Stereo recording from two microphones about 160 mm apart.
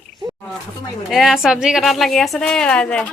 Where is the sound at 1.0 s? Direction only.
Centre (ahead or behind).